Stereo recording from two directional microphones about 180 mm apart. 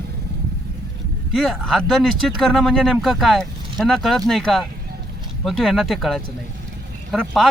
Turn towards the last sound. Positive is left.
turn(degrees=0)  # may be behind; listen again after turning